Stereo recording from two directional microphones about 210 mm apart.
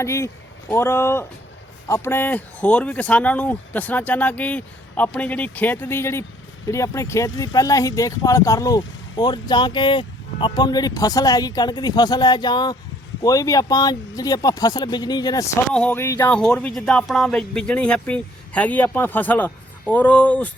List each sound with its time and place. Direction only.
0.0 s speech: 15° left (ahead or behind)
15.7 s speech: 5° left (ahead or behind)